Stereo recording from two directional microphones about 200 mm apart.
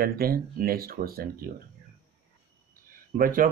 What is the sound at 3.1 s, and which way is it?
Speech, 45° right (ahead or behind).